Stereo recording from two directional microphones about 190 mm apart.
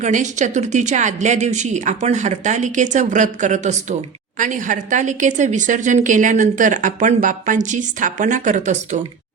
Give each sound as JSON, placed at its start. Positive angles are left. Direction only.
{"t": 0.0, "sound": "speech", "side_deg": -40}